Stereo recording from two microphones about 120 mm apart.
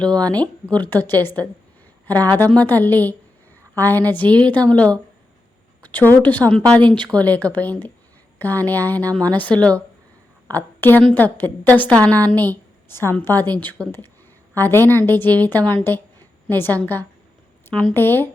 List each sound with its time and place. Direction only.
0.0 s a woman's voice: 10° left (ahead or behind)